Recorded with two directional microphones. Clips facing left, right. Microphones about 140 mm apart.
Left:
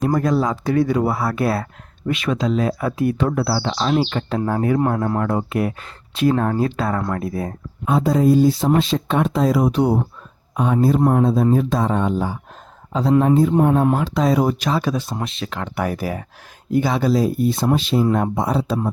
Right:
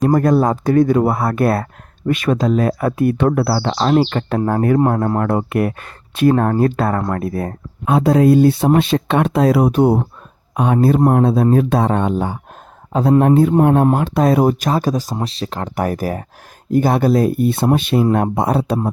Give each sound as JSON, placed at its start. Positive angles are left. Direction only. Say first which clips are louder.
{"t": 0.1, "sound": "speech", "louder": "right 5 dB", "side_deg": -55}